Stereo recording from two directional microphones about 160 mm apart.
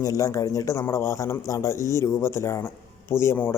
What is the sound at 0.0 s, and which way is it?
Speech, 20° left (ahead or behind).